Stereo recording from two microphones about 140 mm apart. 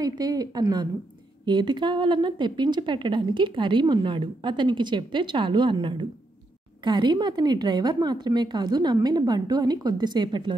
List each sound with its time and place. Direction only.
0.0 s a woman's voice: 25° right (ahead or behind)